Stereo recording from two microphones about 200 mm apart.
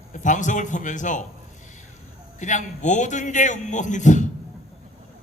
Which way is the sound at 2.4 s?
35° left (ahead or behind).